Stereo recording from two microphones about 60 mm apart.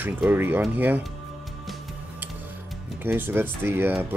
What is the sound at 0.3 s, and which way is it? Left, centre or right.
Speech, right.